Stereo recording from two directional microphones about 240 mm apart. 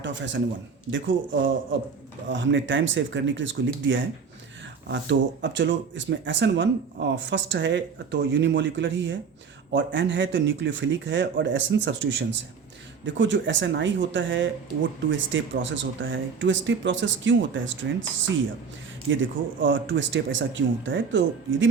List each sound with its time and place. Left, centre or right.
0.0 s speech: right
2.3 s speech: right
19.1 s speech: right